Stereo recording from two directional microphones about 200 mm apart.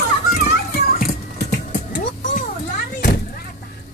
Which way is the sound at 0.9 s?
50° left (ahead or behind).